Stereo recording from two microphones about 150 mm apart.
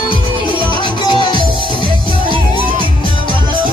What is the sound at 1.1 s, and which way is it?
Music, 30° left (ahead or behind).